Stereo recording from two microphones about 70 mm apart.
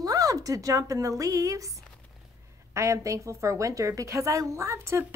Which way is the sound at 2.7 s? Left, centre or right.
Right.